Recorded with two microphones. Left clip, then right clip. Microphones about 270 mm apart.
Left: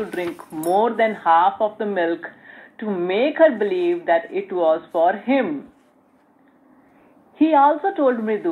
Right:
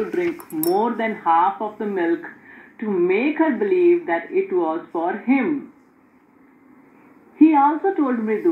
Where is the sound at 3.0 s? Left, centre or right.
Left.